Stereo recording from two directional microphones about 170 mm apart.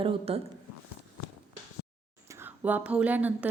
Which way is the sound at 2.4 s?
10° right (ahead or behind).